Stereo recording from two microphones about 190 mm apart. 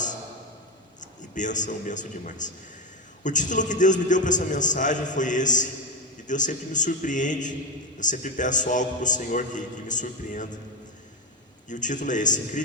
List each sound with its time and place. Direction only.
1.0 s a man's voice: 40° left (ahead or behind)
11.7 s a man's voice: 40° left (ahead or behind)